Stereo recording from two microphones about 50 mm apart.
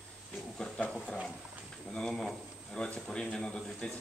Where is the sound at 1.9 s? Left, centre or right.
Centre.